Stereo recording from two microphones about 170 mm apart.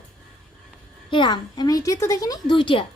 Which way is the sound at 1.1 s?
25° left (ahead or behind).